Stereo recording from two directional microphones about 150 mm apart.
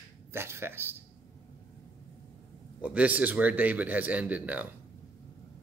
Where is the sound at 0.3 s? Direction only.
15° right (ahead or behind).